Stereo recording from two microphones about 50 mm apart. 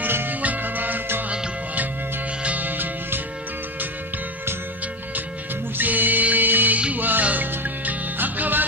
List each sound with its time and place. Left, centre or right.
0.0 s music: right
2.4 s music: right
5.8 s music: right